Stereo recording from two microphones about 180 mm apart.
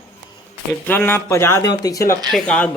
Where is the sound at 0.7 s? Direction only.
10° left (ahead or behind).